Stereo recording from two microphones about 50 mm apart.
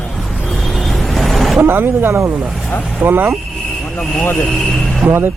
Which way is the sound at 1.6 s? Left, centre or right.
Right.